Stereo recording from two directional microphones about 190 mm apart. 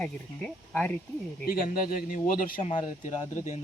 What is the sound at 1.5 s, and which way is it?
Speech, 50° left (ahead or behind).